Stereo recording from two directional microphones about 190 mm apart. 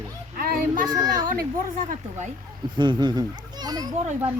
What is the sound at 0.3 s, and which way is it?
Child singing, 50° right (ahead or behind).